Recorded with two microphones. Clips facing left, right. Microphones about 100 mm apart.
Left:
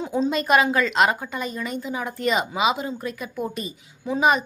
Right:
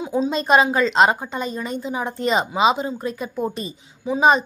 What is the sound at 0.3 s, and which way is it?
A woman's voice, 25° right (ahead or behind).